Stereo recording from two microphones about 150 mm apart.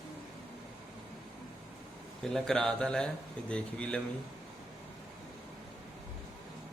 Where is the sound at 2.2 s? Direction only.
5° left (ahead or behind).